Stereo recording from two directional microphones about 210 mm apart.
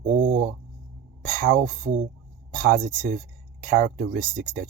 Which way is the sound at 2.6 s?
45° right (ahead or behind).